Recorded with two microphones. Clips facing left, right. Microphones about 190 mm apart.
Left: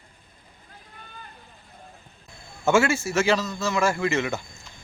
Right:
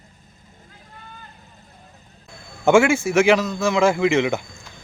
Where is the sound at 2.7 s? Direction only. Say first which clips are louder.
Right 6 dB; 15° right (ahead or behind).